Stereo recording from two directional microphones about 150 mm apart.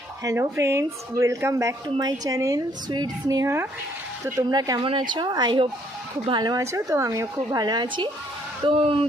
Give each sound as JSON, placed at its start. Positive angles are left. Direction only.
{"t": 0.3, "sound": "speech", "side_deg": -20}